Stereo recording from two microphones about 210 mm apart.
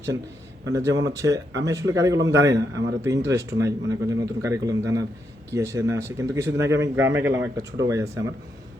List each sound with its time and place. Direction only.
0.7 s speech: 15° right (ahead or behind)